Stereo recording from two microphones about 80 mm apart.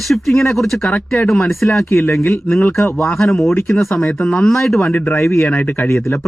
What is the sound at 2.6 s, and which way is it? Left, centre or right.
Speech, centre.